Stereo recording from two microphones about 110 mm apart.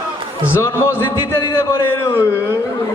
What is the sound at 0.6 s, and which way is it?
Speech, 25° left (ahead or behind).